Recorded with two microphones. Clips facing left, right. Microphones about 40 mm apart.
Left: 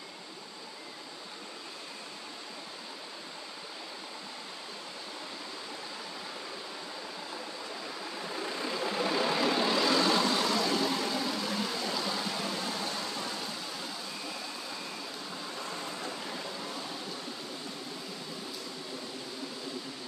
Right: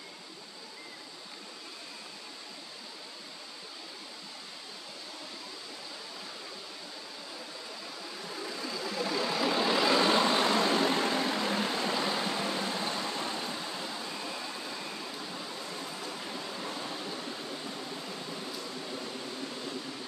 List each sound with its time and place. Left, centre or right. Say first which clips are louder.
8.4 s a sound: left 3 dB; left
9.1 s vehicle: left 1 dB; centre
9.6 s vehicle: right 1 dB; centre
9.8 s vehicle: right 3 dB; right